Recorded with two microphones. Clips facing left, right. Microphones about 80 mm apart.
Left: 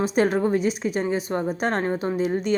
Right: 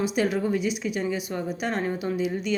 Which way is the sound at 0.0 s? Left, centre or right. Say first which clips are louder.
Left 4 dB; left.